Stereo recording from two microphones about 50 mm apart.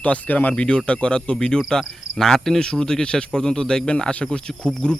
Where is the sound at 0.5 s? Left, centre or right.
Left.